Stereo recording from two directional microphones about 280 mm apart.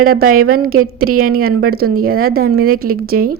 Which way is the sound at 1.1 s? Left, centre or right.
Right.